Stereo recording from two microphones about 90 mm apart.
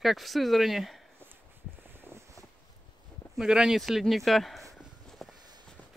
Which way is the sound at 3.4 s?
5° right (ahead or behind).